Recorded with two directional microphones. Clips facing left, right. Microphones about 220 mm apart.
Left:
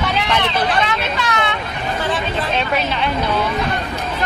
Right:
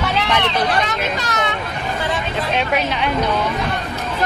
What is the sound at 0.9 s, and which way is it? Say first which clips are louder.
Speech: left 1 dB; 40° right (ahead or behind).